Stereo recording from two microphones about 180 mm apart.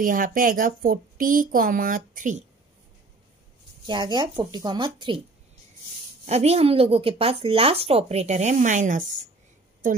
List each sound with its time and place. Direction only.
0.0 s speech: 50° right (ahead or behind)
3.8 s speech: 25° right (ahead or behind)
6.2 s a woman's voice: 35° right (ahead or behind)